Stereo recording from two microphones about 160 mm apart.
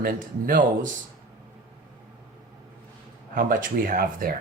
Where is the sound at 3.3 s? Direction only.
60° right (ahead or behind).